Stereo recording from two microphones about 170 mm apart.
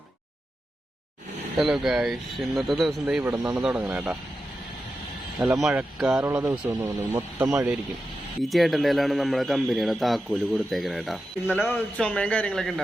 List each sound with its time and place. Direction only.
1.5 s a man's voice: centre (ahead or behind)
5.4 s a man's voice: 5° right (ahead or behind)
6.4 s speech: 20° right (ahead or behind)
8.4 s a man's voice: centre (ahead or behind)
11.4 s a man's voice: 10° left (ahead or behind)